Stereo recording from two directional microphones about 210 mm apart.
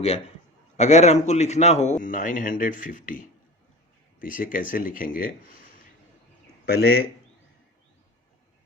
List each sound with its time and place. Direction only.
0.8 s a man's voice: 35° left (ahead or behind)
6.7 s speech: 50° left (ahead or behind)